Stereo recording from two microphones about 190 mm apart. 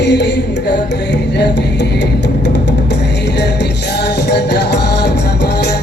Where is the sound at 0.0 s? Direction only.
65° left (ahead or behind).